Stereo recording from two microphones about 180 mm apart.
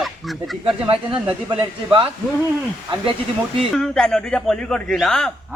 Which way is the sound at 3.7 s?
5° left (ahead or behind).